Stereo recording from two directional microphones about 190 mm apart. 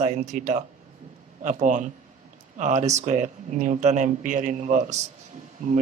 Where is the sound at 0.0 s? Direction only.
40° right (ahead or behind).